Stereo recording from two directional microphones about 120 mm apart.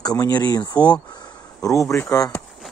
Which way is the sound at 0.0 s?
35° left (ahead or behind).